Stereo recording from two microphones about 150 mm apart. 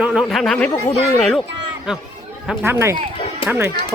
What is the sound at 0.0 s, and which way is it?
Speech, 5° right (ahead or behind).